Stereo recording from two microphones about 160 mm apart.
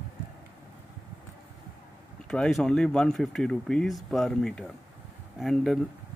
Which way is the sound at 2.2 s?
5° left (ahead or behind).